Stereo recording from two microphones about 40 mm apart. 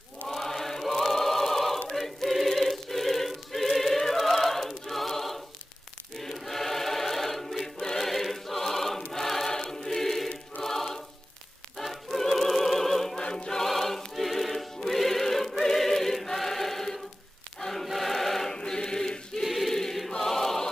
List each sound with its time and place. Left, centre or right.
0.3 s choir: centre
11.7 s music: centre
13.2 s choir: left
13.7 s choir: centre
18.5 s choir: centre
19.4 s choir: centre